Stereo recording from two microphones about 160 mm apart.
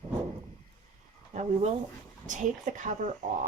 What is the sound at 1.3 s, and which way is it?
A woman's voice, 45° right (ahead or behind).